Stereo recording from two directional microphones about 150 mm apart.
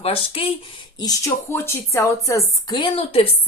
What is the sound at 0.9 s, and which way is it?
A woman's voice, 25° left (ahead or behind).